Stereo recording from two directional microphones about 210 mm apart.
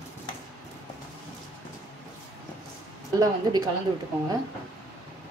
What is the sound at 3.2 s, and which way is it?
Speech, 20° right (ahead or behind).